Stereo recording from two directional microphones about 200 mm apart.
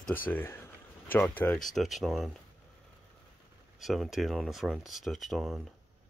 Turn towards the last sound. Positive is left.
turn(degrees=0)  # may be behind; listen again after turning